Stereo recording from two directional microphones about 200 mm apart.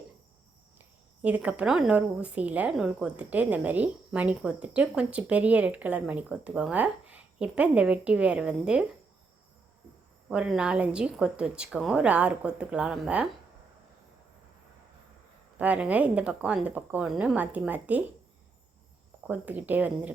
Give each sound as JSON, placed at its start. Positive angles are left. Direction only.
{"t": 1.2, "sound": "a woman's voice", "side_deg": -5}
{"t": 10.2, "sound": "speech", "side_deg": -5}
{"t": 15.5, "sound": "a woman's voice", "side_deg": -5}
{"t": 19.3, "sound": "a woman's voice", "side_deg": -10}